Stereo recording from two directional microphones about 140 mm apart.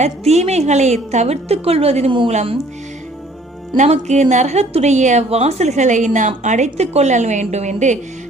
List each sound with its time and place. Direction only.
0.0 s a woman's voice: 50° right (ahead or behind)
2.3 s a woman's voice: 50° right (ahead or behind)
3.8 s a woman's voice: 55° right (ahead or behind)